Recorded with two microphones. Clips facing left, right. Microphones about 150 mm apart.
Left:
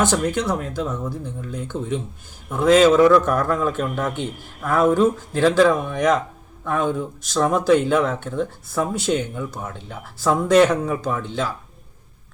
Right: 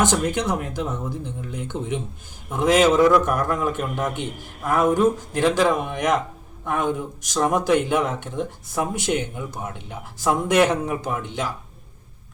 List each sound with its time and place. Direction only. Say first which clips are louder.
0.0 s speech: left 1 dB; 20° right (ahead or behind)